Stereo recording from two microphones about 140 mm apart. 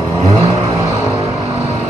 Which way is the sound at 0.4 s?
20° right (ahead or behind).